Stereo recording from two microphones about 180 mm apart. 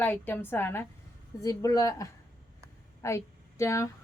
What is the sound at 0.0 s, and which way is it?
A woman's voice, 10° left (ahead or behind).